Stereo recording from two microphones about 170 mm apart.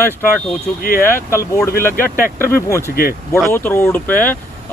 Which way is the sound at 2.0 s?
55° left (ahead or behind).